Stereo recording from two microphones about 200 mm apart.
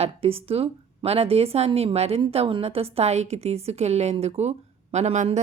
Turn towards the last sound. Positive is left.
turn(degrees=-35)  # may be behind; listen again after turning